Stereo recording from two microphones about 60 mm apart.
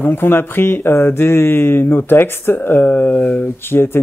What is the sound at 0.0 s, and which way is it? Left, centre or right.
Speech, left.